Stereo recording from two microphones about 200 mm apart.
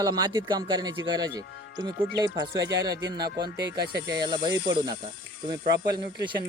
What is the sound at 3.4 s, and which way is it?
Speech, 55° right (ahead or behind).